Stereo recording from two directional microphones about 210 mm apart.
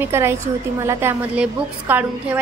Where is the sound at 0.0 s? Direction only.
10° right (ahead or behind).